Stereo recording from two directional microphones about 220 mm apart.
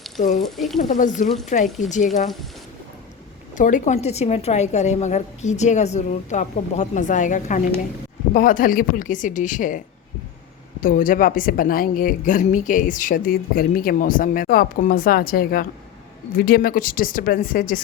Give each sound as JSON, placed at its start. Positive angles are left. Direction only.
{"t": 0.4, "sound": "speech", "side_deg": 0}
{"t": 0.8, "sound": "speech", "side_deg": 35}
{"t": 3.5, "sound": "speech", "side_deg": 35}